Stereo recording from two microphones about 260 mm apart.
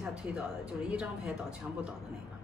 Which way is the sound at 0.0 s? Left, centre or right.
Centre.